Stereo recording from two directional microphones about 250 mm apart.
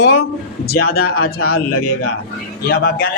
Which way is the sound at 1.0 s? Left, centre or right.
Left.